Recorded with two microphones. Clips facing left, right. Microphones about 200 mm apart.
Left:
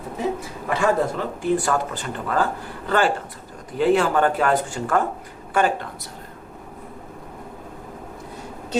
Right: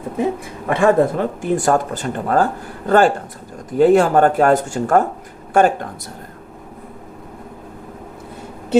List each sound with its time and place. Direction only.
0.7 s speech: 50° right (ahead or behind)